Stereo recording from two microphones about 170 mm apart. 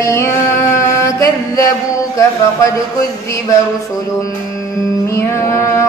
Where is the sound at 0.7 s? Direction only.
20° left (ahead or behind).